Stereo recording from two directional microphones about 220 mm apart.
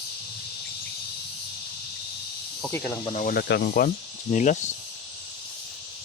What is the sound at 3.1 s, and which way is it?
Speech, 40° left (ahead or behind).